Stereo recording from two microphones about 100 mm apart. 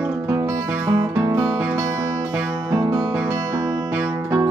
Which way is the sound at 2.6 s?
35° right (ahead or behind).